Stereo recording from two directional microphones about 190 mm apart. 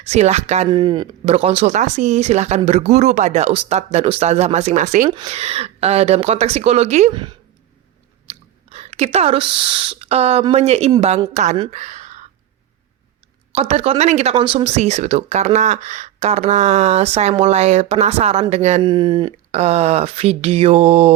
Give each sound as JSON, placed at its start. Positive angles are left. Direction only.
{"t": 0.0, "sound": "speech", "side_deg": -35}
{"t": 0.7, "sound": "speech", "side_deg": -25}
{"t": 5.0, "sound": "speech", "side_deg": -25}
{"t": 7.1, "sound": "speech", "side_deg": -25}
{"t": 8.3, "sound": "chewing", "side_deg": -35}
{"t": 9.1, "sound": "speech", "side_deg": -30}
{"t": 11.7, "sound": "a sound", "side_deg": -40}
{"t": 13.5, "sound": "speech", "side_deg": -35}
{"t": 18.8, "sound": "speech", "side_deg": -25}